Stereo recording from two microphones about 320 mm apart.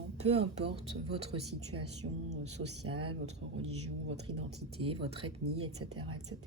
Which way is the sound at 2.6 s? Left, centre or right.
Right.